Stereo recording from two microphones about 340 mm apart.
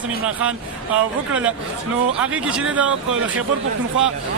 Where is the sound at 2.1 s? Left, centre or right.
Centre.